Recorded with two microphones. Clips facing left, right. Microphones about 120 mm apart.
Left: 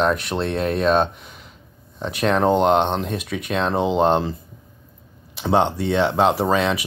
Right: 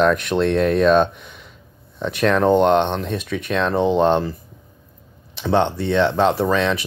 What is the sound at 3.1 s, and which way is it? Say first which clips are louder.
Speech: right 2 dB; 10° left (ahead or behind).